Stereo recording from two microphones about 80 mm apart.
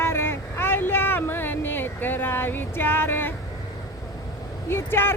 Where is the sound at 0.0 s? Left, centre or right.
Left.